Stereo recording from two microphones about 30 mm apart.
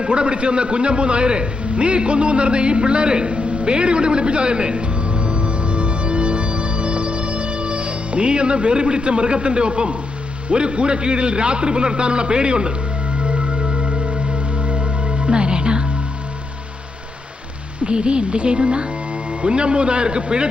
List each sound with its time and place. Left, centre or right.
0.0 s a man's voice: right
3.3 s music: right
10.5 s a man's voice: right
13.2 s music: right
17.7 s a man's voice: right